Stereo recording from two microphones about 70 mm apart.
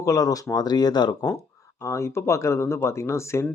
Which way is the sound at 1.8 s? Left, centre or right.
Left.